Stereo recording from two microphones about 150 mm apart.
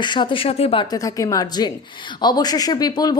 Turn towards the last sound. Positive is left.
turn(degrees=25)  # may be behind; listen again after turning